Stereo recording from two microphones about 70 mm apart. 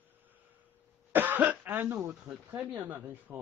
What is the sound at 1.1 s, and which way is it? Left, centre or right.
Cough, right.